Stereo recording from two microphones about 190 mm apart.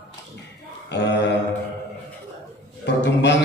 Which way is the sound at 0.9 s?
65° left (ahead or behind).